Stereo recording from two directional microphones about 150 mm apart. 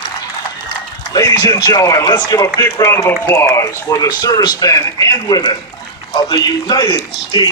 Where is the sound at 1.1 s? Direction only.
25° left (ahead or behind).